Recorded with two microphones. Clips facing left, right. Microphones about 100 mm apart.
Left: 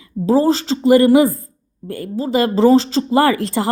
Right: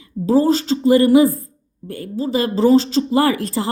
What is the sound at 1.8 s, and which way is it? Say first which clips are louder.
Speech: left 3 dB; 25° right (ahead or behind).